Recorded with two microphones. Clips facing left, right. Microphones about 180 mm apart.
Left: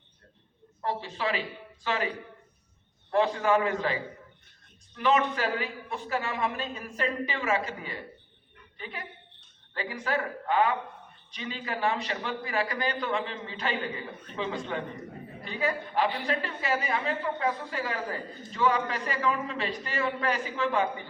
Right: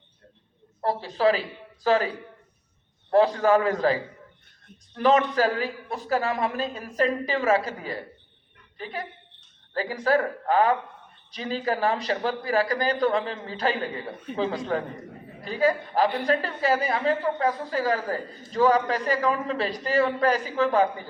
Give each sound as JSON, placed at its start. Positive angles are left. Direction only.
{"t": 0.8, "sound": "a man's voice", "side_deg": -35}
{"t": 3.1, "sound": "a man's voice", "side_deg": -40}
{"t": 4.9, "sound": "a man's voice", "side_deg": -40}